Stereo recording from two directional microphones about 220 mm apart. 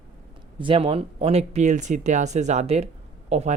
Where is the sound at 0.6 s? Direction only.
25° right (ahead or behind).